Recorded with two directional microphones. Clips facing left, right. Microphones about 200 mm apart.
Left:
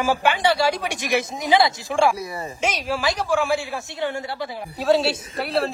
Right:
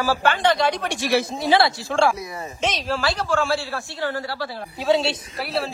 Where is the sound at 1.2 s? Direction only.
20° left (ahead or behind).